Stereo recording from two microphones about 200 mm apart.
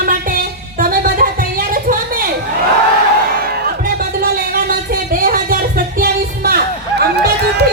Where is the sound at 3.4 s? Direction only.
45° right (ahead or behind).